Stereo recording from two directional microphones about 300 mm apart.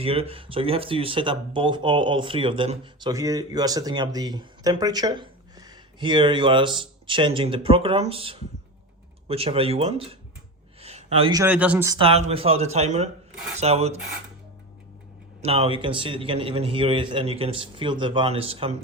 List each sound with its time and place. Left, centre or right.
0.0 s speech: centre
15.4 s speech: centre